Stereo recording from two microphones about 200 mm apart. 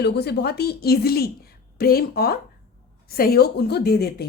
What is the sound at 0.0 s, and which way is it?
A woman's voice, 55° left (ahead or behind).